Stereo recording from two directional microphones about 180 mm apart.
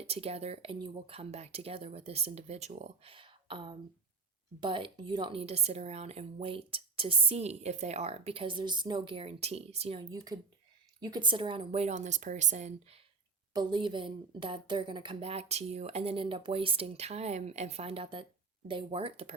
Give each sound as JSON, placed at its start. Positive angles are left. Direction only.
{"t": 0.1, "sound": "a woman's voice", "side_deg": -35}
{"t": 10.1, "sound": "a woman's voice", "side_deg": -20}
{"t": 13.5, "sound": "a woman's voice", "side_deg": -25}